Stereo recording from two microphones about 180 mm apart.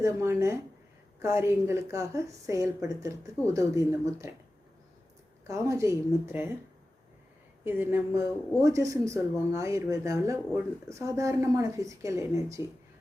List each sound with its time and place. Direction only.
0.0 s speech: 15° right (ahead or behind)
5.5 s speech: 15° right (ahead or behind)
7.6 s speech: 10° right (ahead or behind)